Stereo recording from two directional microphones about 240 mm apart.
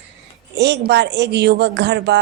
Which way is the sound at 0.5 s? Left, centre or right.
Right.